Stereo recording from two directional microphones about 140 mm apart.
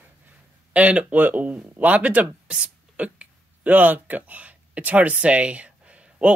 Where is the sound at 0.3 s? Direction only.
10° right (ahead or behind).